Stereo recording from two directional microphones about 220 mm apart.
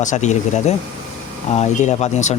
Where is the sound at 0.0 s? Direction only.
35° left (ahead or behind).